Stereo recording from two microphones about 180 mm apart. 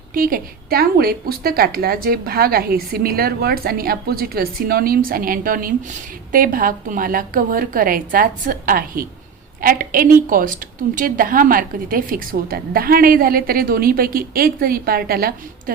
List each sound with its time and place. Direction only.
0.1 s a woman's voice: 50° right (ahead or behind)